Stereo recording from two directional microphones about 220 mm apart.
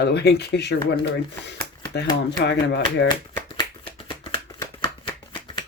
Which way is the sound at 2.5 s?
50° left (ahead or behind).